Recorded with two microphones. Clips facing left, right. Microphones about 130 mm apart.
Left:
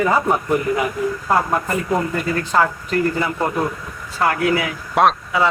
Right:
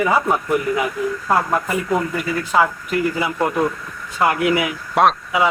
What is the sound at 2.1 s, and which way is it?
Speech, 10° right (ahead or behind).